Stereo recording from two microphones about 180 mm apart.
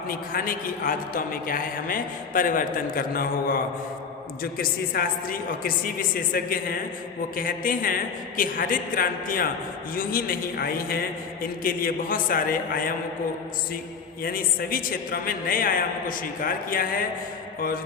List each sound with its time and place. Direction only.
0.1 s a man's voice: 55° left (ahead or behind)
14.2 s a man's voice: 55° left (ahead or behind)